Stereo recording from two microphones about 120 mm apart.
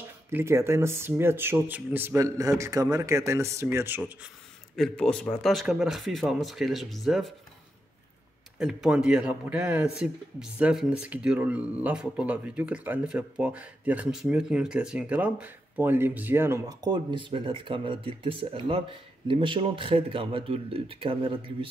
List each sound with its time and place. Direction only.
0.3 s speech: 20° right (ahead or behind)
4.7 s speech: 5° left (ahead or behind)
8.5 s speech: 5° right (ahead or behind); by 21.6 s 45° right (ahead or behind)